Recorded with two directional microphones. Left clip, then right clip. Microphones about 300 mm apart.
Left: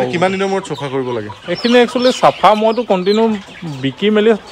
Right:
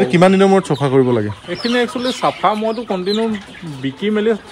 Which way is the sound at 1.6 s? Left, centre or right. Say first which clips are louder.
Left 7 dB; left.